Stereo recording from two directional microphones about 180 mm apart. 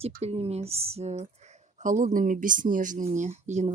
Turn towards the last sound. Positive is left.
turn(degrees=-40)  # may be behind; listen again after turning